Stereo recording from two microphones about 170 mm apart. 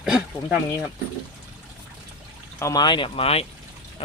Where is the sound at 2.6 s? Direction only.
20° left (ahead or behind).